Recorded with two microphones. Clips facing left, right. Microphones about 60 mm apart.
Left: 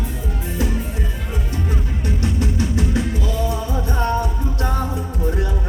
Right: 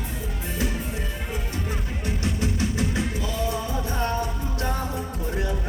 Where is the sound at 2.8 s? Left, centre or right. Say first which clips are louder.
Left 5 dB; centre.